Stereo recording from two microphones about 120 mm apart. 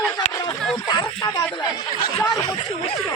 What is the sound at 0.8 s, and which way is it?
Speech, 35° left (ahead or behind).